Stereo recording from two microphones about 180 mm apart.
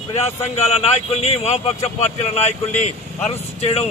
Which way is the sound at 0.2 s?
35° left (ahead or behind).